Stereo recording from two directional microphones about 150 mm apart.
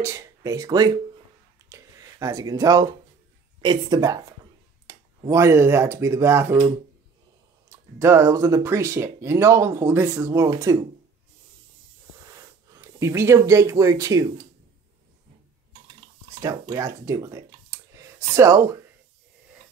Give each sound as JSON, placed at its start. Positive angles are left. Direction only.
{"t": 0.0, "sound": "speech", "side_deg": -20}
{"t": 1.7, "sound": "a sound", "side_deg": -20}
{"t": 3.6, "sound": "speech", "side_deg": -25}
{"t": 7.7, "sound": "speech", "side_deg": -20}
{"t": 12.7, "sound": "speech", "side_deg": -20}
{"t": 16.3, "sound": "speech", "side_deg": -20}